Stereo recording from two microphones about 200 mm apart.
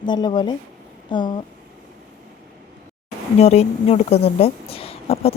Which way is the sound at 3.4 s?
30° left (ahead or behind).